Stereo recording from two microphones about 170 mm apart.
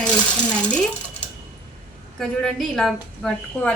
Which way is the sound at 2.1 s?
5° left (ahead or behind).